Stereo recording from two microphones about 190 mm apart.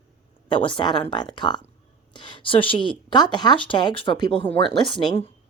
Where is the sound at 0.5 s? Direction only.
25° left (ahead or behind).